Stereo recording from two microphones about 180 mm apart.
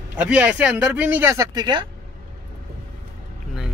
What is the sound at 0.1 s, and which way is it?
Speech, 10° right (ahead or behind).